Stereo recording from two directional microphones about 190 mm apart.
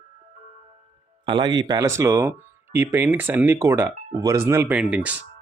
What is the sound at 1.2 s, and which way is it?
Speech, 25° right (ahead or behind).